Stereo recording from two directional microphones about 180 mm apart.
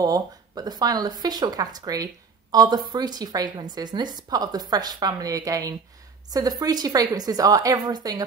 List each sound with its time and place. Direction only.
0.0 s a woman's voice: 20° right (ahead or behind)